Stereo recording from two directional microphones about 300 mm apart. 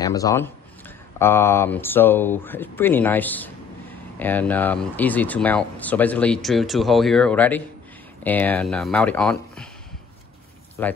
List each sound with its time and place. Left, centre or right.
0.0 s speech: centre
10.8 s speech: centre